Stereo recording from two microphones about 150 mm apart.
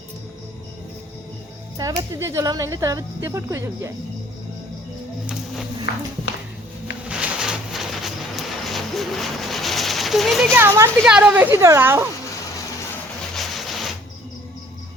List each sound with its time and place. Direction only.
1.8 s speech: 25° right (ahead or behind)
5.2 s music: 5° right (ahead or behind)
5.9 s speech: 90° left
7.1 s a sound: 5° right (ahead or behind)
10.5 s a woman's voice: 15° right (ahead or behind)
13.3 s a sound: centre (ahead or behind)